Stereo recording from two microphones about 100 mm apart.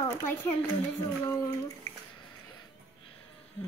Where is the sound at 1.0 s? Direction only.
35° left (ahead or behind).